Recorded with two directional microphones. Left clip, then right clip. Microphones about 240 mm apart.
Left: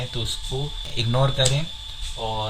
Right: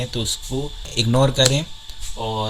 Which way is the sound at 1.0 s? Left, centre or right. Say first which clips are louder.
Right 5 dB; right.